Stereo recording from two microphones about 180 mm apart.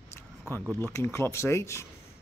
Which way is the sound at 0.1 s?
15° left (ahead or behind).